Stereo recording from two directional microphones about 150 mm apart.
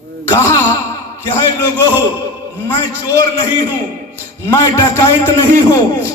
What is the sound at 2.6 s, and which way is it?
A man's voice, 20° left (ahead or behind).